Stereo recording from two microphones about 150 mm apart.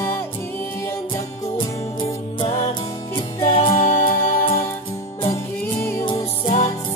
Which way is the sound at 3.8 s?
60° left (ahead or behind).